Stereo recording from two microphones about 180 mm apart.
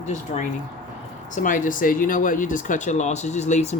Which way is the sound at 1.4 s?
45° left (ahead or behind).